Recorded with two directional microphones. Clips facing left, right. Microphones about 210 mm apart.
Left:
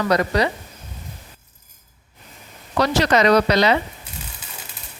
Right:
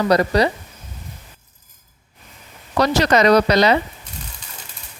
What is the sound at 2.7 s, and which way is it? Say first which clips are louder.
Speech: right 2 dB; 40° right (ahead or behind).